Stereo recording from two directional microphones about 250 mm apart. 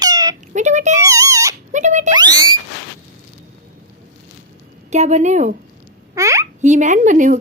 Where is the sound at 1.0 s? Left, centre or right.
Centre.